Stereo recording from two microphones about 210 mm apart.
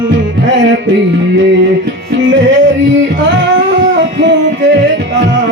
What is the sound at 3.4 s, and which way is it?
Music, 65° right (ahead or behind).